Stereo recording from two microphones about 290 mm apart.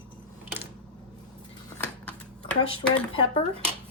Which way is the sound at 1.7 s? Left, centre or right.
Centre.